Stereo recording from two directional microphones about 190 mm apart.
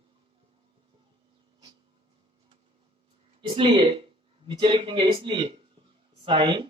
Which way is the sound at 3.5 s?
30° right (ahead or behind).